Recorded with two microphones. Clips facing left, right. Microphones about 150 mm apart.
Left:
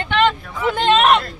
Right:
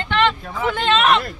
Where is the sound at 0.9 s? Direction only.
45° left (ahead or behind).